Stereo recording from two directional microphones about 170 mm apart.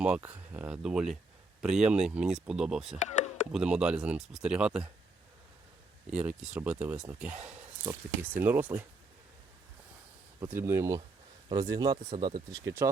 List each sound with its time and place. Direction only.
0.0 s speech: 5° right (ahead or behind)
3.0 s chop: 45° left (ahead or behind)
3.5 s speech: 5° right (ahead or behind)
6.1 s speech: 5° right (ahead or behind)
10.4 s speech: 15° right (ahead or behind)